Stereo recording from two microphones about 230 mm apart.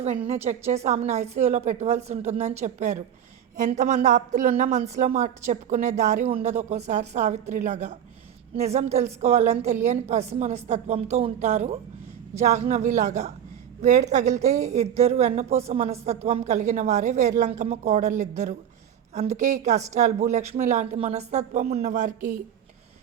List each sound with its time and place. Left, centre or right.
0.7 s a woman's voice: right